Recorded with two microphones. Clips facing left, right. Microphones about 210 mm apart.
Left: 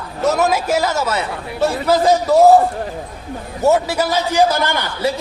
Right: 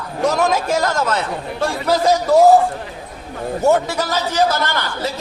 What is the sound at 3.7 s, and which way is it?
A man's voice, 5° left (ahead or behind).